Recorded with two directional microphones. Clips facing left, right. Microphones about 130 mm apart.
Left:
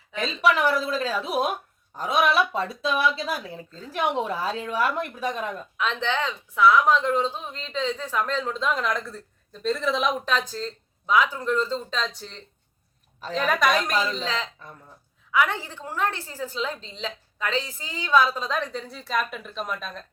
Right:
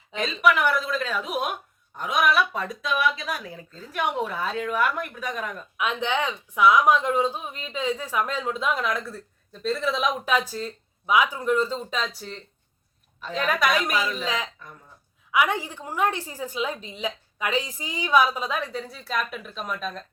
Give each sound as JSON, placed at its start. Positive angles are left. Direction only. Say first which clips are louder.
{"t": 0.1, "sound": "speech", "louder": "even", "side_deg": -20}
{"t": 0.4, "sound": "speech", "louder": "even", "side_deg": 30}
{"t": 5.7, "sound": "speech", "louder": "right 1 dB", "side_deg": -10}